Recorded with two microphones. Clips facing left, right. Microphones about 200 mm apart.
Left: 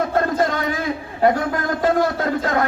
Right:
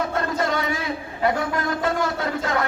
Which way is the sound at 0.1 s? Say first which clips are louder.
Left 4 dB; 50° left (ahead or behind).